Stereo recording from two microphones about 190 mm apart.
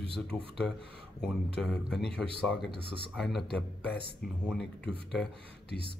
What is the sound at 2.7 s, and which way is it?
Speech, 30° right (ahead or behind).